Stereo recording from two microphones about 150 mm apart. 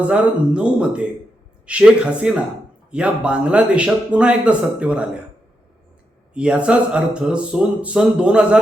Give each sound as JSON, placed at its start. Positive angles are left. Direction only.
{"t": 0.0, "sound": "speech", "side_deg": -10}
{"t": 6.3, "sound": "speech", "side_deg": -5}